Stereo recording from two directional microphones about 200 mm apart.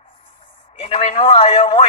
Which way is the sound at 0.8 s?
30° left (ahead or behind).